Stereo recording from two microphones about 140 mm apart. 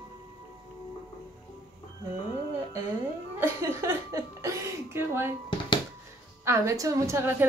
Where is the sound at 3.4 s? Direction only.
20° right (ahead or behind).